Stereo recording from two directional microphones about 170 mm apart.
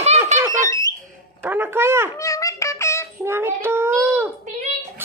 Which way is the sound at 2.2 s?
20° left (ahead or behind).